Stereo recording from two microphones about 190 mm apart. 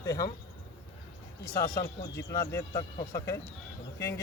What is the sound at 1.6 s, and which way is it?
Speech, 20° left (ahead or behind).